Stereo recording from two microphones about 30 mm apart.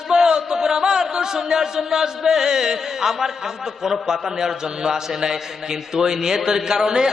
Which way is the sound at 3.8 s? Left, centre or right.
Centre.